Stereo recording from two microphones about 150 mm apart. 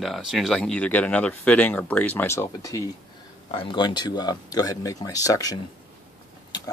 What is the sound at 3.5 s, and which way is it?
Speech, 35° left (ahead or behind).